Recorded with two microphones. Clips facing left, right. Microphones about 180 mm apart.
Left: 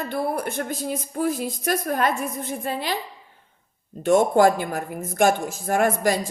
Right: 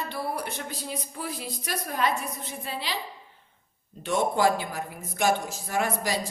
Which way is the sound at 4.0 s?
50° left (ahead or behind).